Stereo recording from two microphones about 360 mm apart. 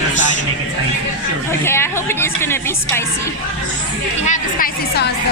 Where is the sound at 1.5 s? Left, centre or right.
Centre.